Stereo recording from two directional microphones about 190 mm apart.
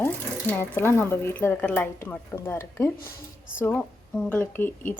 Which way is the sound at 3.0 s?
50° left (ahead or behind).